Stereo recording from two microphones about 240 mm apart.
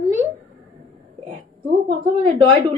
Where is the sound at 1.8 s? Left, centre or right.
Right.